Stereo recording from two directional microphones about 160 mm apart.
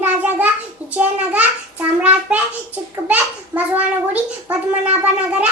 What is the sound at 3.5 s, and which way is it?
Child singing, 15° right (ahead or behind).